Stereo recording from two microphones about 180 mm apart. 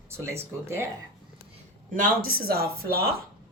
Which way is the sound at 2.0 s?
55° right (ahead or behind).